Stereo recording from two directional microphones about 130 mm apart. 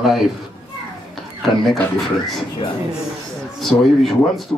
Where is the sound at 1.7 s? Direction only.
Centre (ahead or behind).